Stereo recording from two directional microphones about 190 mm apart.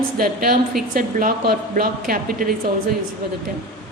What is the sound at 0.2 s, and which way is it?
A woman's voice, 50° right (ahead or behind).